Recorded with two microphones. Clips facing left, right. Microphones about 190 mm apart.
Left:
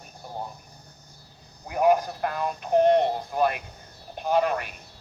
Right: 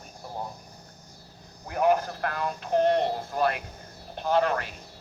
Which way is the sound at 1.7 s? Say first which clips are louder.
Left 2 dB; 15° left (ahead or behind).